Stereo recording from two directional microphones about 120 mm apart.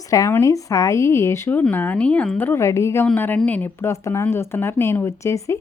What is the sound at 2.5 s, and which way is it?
Speech, 25° left (ahead or behind).